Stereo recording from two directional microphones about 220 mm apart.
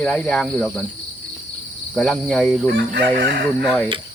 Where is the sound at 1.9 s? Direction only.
5° left (ahead or behind).